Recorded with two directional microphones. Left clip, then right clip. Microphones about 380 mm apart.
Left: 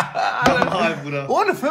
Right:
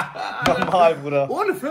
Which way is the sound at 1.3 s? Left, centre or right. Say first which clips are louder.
Left 4 dB; left.